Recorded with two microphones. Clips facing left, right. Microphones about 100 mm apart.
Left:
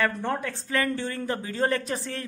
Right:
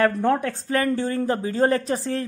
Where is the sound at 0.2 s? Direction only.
55° right (ahead or behind).